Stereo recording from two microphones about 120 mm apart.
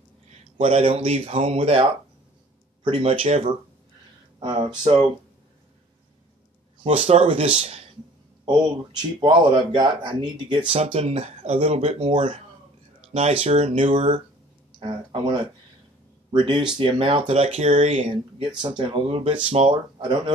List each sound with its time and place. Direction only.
0.3 s speech: 55° right (ahead or behind)
6.8 s speech: 50° right (ahead or behind)
8.5 s speech: 40° right (ahead or behind)
10.7 s speech: 55° right (ahead or behind)
14.8 s speech: 45° right (ahead or behind); by 18.1 s 60° right (ahead or behind)
18.6 s speech: 40° right (ahead or behind)